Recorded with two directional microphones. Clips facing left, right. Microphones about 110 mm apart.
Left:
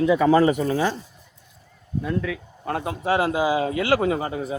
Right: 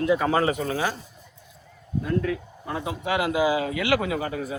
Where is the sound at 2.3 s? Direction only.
65° left (ahead or behind).